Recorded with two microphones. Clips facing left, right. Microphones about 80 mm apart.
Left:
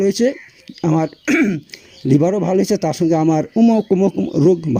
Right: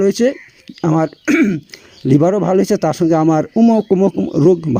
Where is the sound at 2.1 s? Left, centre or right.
Right.